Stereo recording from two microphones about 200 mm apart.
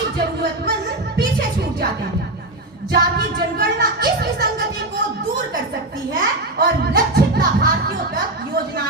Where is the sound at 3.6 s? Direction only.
50° right (ahead or behind).